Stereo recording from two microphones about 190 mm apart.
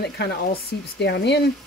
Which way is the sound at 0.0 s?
60° left (ahead or behind).